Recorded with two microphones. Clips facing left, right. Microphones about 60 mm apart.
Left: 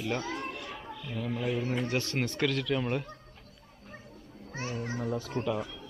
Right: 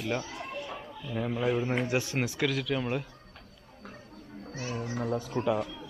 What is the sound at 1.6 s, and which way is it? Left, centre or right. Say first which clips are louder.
Speech: right 2 dB; right.